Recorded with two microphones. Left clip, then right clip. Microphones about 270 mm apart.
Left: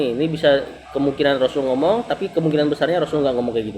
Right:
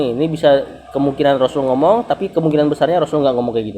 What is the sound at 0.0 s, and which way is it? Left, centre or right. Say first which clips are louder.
A man's voice: right 3 dB; right.